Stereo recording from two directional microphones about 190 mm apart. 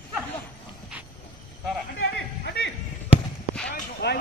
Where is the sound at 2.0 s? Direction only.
60° left (ahead or behind).